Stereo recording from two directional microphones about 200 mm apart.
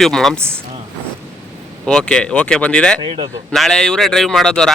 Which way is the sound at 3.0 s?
25° right (ahead or behind).